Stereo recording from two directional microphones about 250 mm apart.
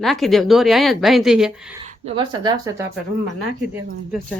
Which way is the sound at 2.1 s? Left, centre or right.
Centre.